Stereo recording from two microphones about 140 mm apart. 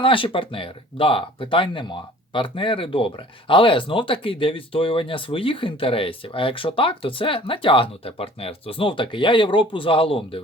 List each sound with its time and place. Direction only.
0.0 s speech: 40° left (ahead or behind)